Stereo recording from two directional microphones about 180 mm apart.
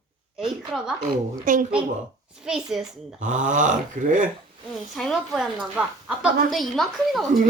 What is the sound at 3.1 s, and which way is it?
Speech, 45° right (ahead or behind).